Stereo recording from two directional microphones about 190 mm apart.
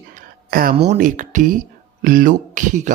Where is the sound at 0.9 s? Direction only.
40° right (ahead or behind).